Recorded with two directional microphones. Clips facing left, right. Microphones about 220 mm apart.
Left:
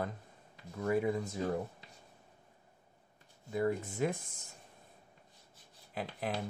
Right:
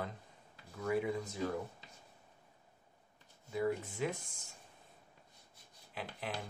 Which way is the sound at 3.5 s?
50° left (ahead or behind).